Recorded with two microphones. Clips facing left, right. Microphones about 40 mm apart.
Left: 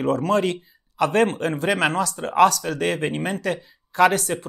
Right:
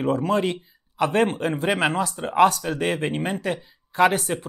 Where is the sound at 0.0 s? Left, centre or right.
Centre.